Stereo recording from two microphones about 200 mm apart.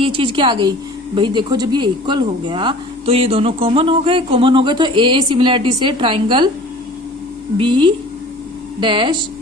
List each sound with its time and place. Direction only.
0.0 s a woman's voice: 25° right (ahead or behind)
7.6 s a woman's voice: 25° right (ahead or behind)